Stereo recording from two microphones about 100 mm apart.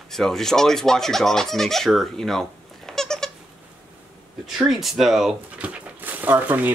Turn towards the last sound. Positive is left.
turn(degrees=-20)  # may be behind; listen again after turning